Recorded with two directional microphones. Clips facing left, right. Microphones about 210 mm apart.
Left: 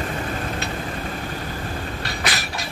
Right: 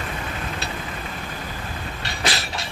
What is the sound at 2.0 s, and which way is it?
Vehicle, 25° right (ahead or behind).